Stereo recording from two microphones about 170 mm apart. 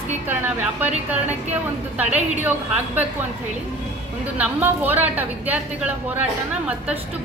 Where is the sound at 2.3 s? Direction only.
10° right (ahead or behind).